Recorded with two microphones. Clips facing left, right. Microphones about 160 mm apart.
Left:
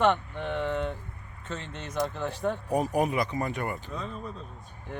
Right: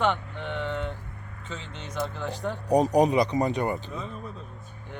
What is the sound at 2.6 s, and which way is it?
Speech, 20° right (ahead or behind).